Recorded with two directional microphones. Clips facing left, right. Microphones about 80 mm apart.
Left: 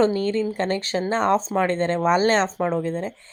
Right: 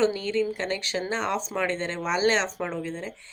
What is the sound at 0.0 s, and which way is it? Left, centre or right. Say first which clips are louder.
Speech: left 4 dB; left.